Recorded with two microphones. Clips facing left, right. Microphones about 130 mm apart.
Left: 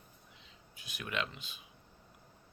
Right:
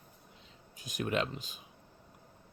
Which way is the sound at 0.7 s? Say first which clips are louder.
Right 7 dB; 40° right (ahead or behind).